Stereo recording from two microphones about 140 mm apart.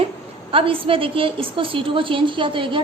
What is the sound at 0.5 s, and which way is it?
A woman's voice, 40° right (ahead or behind).